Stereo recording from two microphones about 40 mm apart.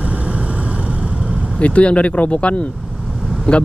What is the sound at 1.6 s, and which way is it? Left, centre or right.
Speech, left.